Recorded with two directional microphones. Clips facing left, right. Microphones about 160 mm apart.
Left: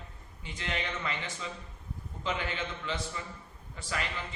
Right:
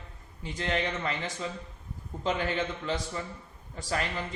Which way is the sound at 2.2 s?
40° right (ahead or behind).